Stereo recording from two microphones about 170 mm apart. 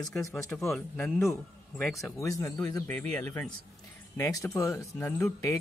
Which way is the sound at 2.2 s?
20° left (ahead or behind).